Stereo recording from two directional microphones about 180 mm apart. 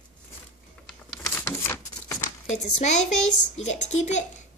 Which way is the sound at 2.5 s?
40° left (ahead or behind).